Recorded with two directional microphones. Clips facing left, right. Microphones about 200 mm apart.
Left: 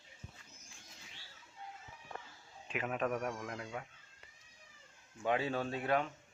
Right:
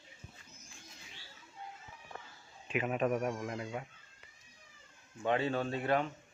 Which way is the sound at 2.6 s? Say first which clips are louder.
Right 4 dB; 10° right (ahead or behind).